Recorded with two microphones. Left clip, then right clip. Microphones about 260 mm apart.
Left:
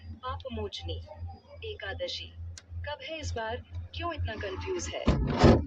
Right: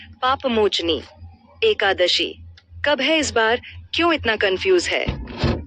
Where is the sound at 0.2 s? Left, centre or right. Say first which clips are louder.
Right 19 dB; right.